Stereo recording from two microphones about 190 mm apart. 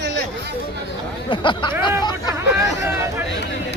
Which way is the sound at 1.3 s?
25° left (ahead or behind).